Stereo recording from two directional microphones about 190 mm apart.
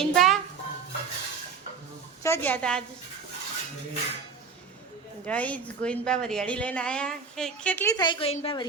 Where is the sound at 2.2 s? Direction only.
10° left (ahead or behind).